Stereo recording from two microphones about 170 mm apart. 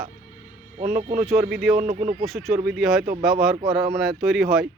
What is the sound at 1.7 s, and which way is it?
Speech, 50° right (ahead or behind).